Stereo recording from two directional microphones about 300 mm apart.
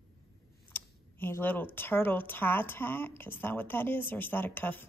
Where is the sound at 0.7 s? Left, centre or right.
Centre.